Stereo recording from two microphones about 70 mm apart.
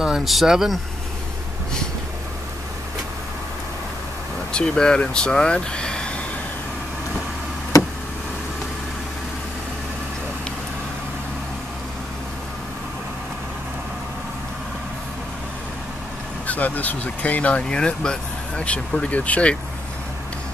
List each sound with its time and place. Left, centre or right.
0.0 s speech: centre
4.5 s speech: centre
16.4 s speech: left